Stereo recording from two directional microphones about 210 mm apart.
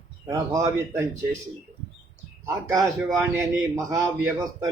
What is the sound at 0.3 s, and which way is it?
Speech, 15° right (ahead or behind).